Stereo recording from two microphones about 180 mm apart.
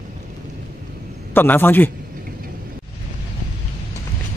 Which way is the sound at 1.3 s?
10° left (ahead or behind).